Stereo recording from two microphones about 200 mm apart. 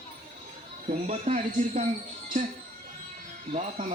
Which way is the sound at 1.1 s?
35° right (ahead or behind).